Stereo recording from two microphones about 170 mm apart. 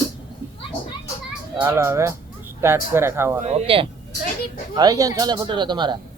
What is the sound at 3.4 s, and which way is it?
Speech, 40° right (ahead or behind).